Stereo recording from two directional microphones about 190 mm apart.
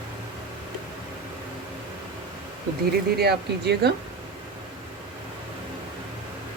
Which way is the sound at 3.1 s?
55° right (ahead or behind).